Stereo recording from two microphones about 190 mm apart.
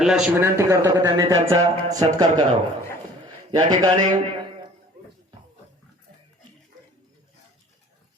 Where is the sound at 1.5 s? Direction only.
20° right (ahead or behind).